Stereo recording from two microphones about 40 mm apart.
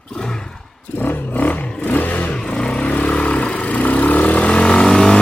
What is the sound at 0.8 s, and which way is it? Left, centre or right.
Roar, left.